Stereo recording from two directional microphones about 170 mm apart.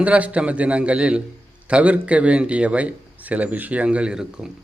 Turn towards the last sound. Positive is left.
turn(degrees=-5)  # may be behind; listen again after turning